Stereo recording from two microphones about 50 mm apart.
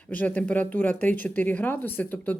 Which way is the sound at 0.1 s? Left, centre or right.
Left.